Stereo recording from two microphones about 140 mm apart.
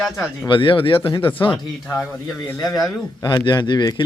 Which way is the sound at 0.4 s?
35° left (ahead or behind).